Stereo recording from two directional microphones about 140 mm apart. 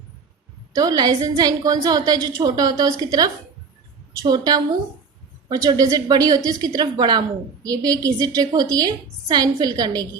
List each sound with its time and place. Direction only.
0.8 s a woman's voice: 30° right (ahead or behind)